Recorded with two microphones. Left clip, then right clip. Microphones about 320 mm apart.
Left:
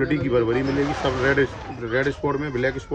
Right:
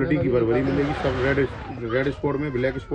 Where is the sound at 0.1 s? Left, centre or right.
Centre.